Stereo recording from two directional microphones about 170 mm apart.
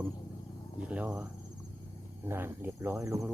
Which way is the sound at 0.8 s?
10° right (ahead or behind).